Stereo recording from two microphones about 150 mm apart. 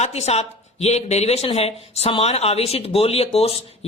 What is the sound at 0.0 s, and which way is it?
A woman's voice, 45° left (ahead or behind).